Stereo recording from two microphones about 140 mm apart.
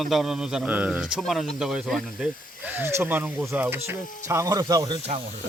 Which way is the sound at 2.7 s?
15° right (ahead or behind).